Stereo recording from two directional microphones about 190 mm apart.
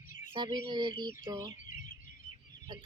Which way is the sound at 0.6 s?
25° right (ahead or behind).